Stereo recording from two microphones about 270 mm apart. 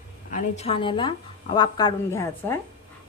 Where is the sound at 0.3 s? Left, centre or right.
Left.